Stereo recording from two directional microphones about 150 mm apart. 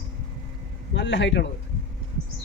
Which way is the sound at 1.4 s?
90° left.